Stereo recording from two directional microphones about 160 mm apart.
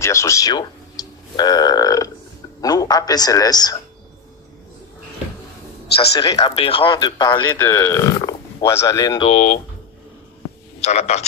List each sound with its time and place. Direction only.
0.0 s speech: 20° left (ahead or behind)
5.9 s speech: 25° left (ahead or behind)
6.5 s speech: 35° left (ahead or behind)
9.3 s a man's voice: 50° left (ahead or behind)
10.8 s a man's voice: 40° left (ahead or behind)